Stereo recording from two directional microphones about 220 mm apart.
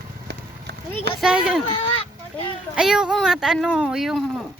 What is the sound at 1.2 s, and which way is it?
Speech, 5° right (ahead or behind).